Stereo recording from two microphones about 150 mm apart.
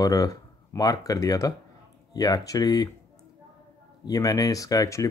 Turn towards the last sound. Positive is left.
turn(degrees=20)  # may be behind; listen again after turning